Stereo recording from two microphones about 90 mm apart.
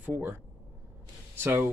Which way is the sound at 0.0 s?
25° right (ahead or behind).